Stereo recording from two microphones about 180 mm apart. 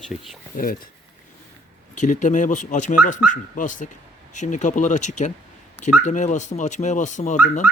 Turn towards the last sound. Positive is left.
turn(degrees=45)  # may be behind; listen again after turning